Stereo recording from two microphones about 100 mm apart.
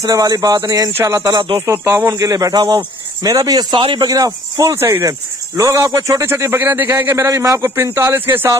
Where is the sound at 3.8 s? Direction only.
55° right (ahead or behind).